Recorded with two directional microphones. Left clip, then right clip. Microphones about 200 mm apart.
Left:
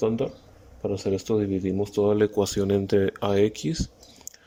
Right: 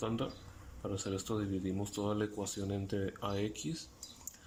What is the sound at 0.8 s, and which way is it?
Speech, 30° left (ahead or behind).